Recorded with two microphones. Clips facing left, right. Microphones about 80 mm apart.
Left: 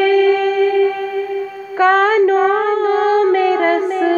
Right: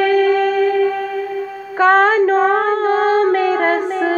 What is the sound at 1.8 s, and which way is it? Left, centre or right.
Female singing, right.